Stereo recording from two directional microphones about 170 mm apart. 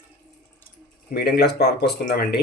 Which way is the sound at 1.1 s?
70° left (ahead or behind).